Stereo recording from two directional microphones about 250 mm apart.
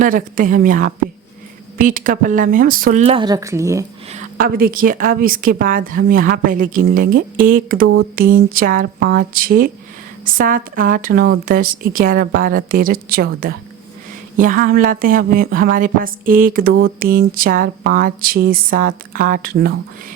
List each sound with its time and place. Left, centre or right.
0.0 s a woman's voice: right; by 3.8 s centre
4.1 s a woman's voice: right